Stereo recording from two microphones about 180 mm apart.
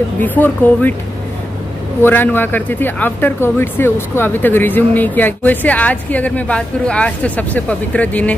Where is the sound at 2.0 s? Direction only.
10° left (ahead or behind).